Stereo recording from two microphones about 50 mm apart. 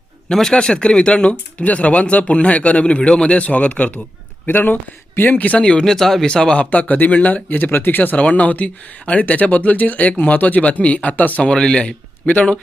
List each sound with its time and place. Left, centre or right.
0.3 s speech: centre
4.4 s speech: left
5.5 s speech: centre
6.7 s speech: left
11.4 s speech: centre